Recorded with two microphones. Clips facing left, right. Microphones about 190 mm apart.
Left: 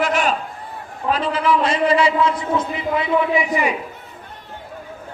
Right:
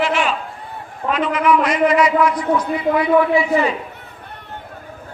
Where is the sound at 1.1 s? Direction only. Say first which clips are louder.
Right 2 dB; 30° left (ahead or behind); by 3.7 s 15° left (ahead or behind).